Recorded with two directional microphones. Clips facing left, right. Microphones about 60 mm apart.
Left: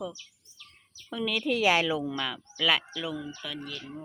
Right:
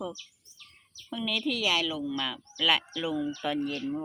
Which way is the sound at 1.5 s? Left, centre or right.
Left.